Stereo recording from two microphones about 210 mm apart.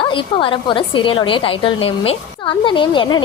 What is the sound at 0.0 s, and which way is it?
Speech, 25° left (ahead or behind).